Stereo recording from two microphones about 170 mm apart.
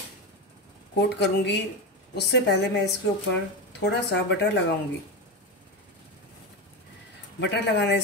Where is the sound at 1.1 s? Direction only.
90° left.